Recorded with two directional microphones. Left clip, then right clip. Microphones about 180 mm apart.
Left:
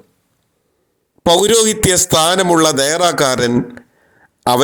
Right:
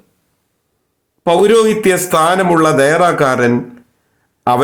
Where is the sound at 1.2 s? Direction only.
35° left (ahead or behind).